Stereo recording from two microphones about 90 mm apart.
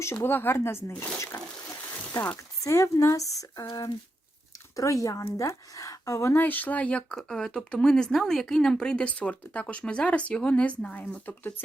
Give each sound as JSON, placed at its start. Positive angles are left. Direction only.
{"t": 0.0, "sound": "speech", "side_deg": 30}
{"t": 2.6, "sound": "a woman's voice", "side_deg": 35}
{"t": 6.3, "sound": "speech", "side_deg": 20}